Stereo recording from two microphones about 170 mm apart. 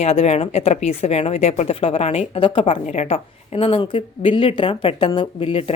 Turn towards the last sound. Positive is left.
turn(degrees=35)  # may be behind; listen again after turning